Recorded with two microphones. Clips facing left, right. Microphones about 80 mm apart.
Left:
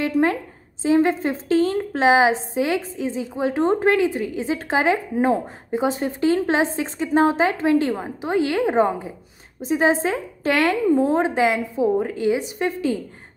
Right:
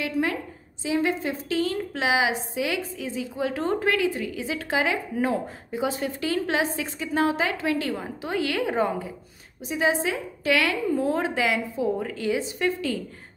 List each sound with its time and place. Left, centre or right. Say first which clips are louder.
0.0 s a woman's voice: left 6 dB; left